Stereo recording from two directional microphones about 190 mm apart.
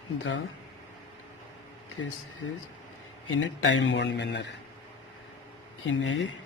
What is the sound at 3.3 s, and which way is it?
Speech, 90° left.